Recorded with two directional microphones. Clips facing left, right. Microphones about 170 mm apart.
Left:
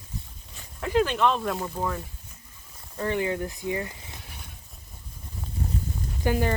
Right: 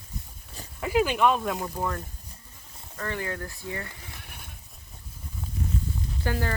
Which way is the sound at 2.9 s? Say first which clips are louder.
Left 6 dB; 20° left (ahead or behind).